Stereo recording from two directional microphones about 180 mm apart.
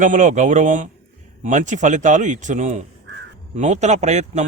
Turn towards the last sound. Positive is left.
turn(degrees=-40)  # may be behind; listen again after turning